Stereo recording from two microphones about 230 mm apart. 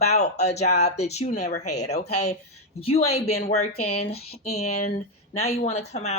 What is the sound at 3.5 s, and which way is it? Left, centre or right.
Speech, left.